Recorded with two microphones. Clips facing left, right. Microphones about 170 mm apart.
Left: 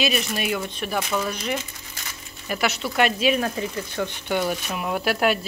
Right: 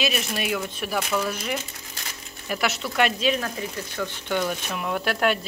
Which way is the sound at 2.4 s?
Centre (ahead or behind).